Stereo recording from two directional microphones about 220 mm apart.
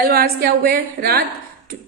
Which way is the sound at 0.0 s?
45° right (ahead or behind).